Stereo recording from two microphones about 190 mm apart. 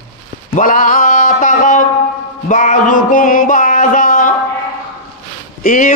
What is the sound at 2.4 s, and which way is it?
Music, 40° left (ahead or behind).